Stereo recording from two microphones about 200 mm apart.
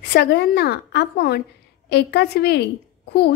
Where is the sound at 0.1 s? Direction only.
55° left (ahead or behind).